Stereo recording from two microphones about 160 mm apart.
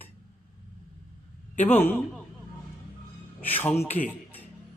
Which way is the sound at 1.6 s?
10° left (ahead or behind).